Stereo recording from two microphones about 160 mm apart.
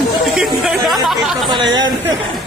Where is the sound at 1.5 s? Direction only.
30° right (ahead or behind).